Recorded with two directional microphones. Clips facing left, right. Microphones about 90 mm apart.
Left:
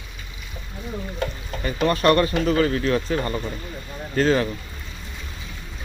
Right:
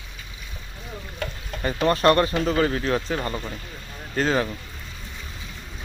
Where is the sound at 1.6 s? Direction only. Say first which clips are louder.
Even; 30° right (ahead or behind).